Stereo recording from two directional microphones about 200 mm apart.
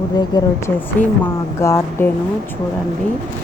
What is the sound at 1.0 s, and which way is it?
Speech, 10° left (ahead or behind).